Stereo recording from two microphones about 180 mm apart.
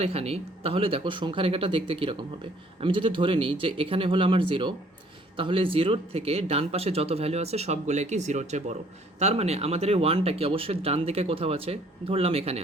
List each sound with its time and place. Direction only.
0.0 s speech: 35° right (ahead or behind)